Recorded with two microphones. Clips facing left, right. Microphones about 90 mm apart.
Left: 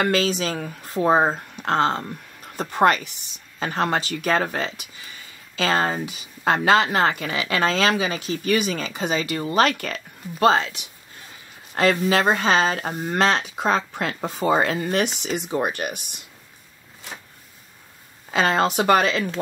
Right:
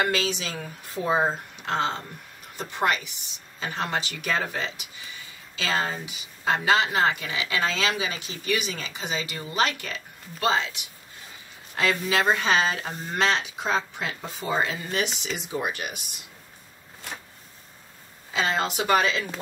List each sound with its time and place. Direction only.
0.0 s speech: 45° left (ahead or behind)
18.3 s speech: 50° left (ahead or behind)